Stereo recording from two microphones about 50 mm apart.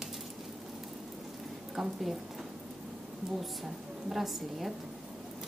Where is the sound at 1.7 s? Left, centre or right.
Centre.